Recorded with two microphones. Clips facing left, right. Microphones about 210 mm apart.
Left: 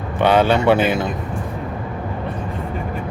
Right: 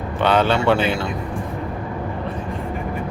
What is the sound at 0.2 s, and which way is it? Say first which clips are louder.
Speech: left 3 dB; 10° left (ahead or behind).